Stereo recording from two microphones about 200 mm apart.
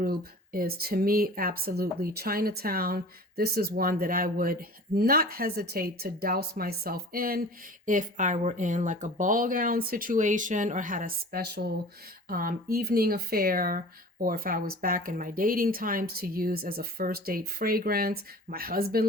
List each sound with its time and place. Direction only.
0.0 s speech: 50° right (ahead or behind)